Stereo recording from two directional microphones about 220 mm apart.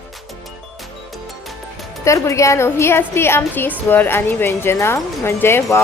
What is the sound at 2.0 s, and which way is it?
A woman's voice, 15° left (ahead or behind).